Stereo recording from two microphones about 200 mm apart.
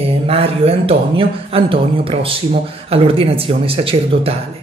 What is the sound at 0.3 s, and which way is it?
A man's voice, 30° right (ahead or behind).